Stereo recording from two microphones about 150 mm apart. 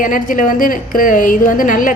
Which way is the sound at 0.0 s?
65° left (ahead or behind).